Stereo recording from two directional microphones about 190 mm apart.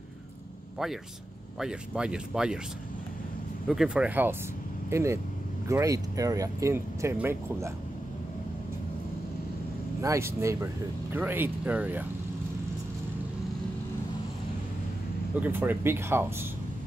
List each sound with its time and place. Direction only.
1.6 s speech: 5° right (ahead or behind)
3.6 s speech: centre (ahead or behind)
10.0 s speech: 15° right (ahead or behind)
15.4 s speech: 10° right (ahead or behind)